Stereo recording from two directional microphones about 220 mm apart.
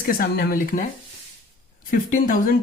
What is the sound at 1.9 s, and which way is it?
Speech, 40° left (ahead or behind).